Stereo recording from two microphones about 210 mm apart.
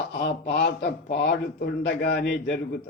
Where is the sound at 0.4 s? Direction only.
50° left (ahead or behind).